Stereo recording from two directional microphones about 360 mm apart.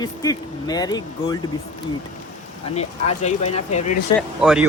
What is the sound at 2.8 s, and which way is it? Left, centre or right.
Speech, centre.